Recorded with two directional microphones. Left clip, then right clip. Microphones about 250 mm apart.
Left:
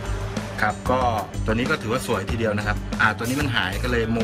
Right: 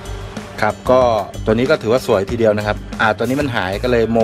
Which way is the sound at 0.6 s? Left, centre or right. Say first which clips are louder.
Right 9 dB; right.